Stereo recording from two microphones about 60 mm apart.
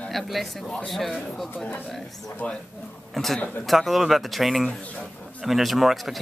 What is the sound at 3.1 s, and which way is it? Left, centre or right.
Speech, centre.